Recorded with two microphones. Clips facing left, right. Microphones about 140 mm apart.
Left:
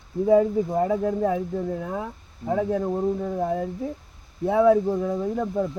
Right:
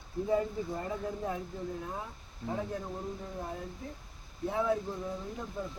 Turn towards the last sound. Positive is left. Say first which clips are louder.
# left 14 dB
turn(degrees=75)  # may be behind; listen again after turning